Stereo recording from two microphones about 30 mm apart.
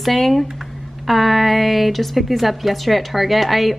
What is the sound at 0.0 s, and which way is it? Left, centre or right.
Speech, centre.